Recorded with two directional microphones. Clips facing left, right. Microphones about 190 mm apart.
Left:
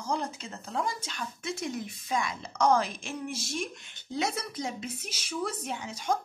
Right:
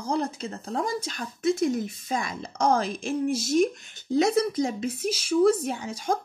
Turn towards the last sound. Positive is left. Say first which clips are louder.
# right 4 dB
turn(degrees=-35)  # may be behind; listen again after turning